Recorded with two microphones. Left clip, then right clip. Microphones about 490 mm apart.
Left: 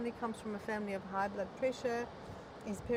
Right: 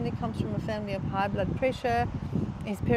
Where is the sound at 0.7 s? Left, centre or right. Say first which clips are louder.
Right 4 dB; right.